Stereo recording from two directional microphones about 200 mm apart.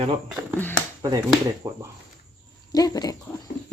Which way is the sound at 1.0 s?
20° right (ahead or behind).